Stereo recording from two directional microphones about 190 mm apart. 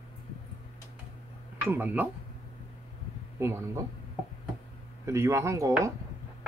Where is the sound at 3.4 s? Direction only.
15° right (ahead or behind).